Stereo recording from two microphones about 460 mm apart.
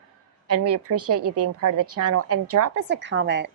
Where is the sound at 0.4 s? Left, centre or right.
Right.